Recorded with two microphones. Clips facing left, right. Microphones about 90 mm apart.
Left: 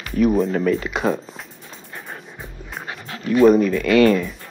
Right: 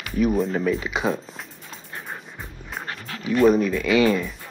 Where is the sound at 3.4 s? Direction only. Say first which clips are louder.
Left 4 dB; centre (ahead or behind).